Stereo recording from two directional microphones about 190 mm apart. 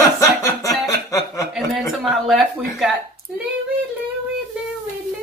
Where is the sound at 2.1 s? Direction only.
Centre (ahead or behind).